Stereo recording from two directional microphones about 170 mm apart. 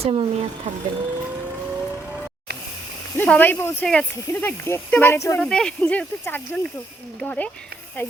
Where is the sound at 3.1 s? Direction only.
10° left (ahead or behind).